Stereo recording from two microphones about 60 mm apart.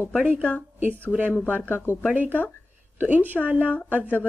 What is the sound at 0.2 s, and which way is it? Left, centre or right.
Speech, right.